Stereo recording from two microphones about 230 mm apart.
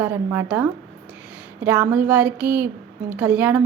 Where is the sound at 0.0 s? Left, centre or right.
Centre.